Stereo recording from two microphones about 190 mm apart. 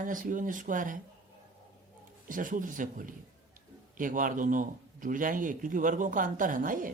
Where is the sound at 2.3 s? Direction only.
45° right (ahead or behind).